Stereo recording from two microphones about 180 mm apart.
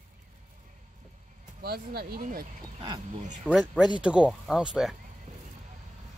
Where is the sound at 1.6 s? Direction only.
60° right (ahead or behind).